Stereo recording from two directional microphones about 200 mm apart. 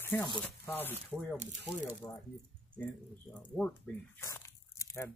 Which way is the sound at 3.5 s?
5° left (ahead or behind).